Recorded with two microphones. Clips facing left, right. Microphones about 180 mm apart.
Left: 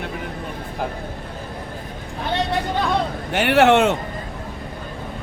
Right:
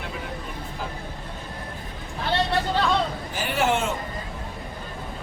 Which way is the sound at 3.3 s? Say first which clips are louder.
Left 10 dB; 70° left (ahead or behind).